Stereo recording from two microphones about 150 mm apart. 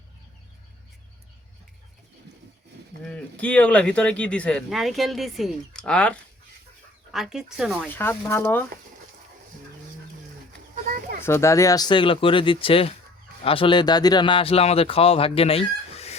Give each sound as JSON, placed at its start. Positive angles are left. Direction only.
{"t": 3.1, "sound": "speech", "side_deg": 10}
{"t": 7.9, "sound": "speech", "side_deg": 15}
{"t": 11.2, "sound": "speech", "side_deg": 20}